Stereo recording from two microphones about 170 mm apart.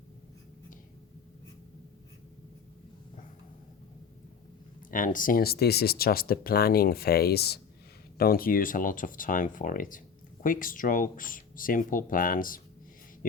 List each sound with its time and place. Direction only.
4.9 s speech: 50° left (ahead or behind); by 7.6 s 70° left (ahead or behind)
8.2 s speech: 60° left (ahead or behind)